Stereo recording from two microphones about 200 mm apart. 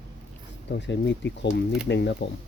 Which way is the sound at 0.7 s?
60° left (ahead or behind).